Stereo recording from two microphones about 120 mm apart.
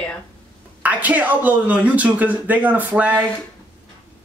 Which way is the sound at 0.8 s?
15° right (ahead or behind).